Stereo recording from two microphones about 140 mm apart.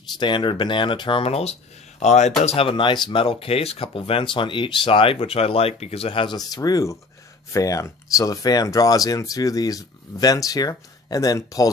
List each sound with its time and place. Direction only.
0.2 s speech: 35° left (ahead or behind)